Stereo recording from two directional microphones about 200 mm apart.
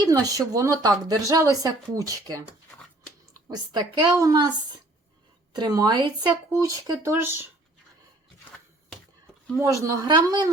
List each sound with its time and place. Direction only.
0.0 s a woman's voice: 20° right (ahead or behind)
3.5 s a woman's voice: 20° right (ahead or behind)
5.5 s a woman's voice: 20° right (ahead or behind)
9.8 s a woman's voice: 15° right (ahead or behind)